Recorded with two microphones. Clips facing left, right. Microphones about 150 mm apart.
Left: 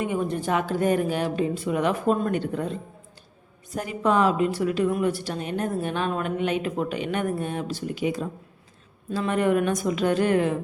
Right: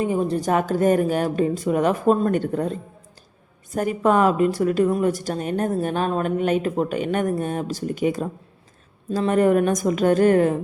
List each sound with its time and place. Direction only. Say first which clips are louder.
0.0 s speech: right 4 dB; 35° right (ahead or behind)
3.8 s speech: right 4 dB; 50° right (ahead or behind)